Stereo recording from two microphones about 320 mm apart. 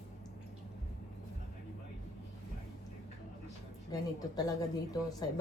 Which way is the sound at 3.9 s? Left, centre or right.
Centre.